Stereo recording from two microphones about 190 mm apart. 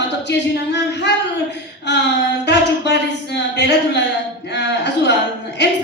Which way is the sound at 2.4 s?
65° left (ahead or behind).